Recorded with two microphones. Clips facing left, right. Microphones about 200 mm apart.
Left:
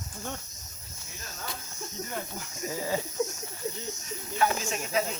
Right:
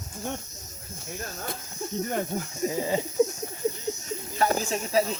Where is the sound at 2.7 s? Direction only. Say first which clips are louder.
Right 3 dB; 20° right (ahead or behind).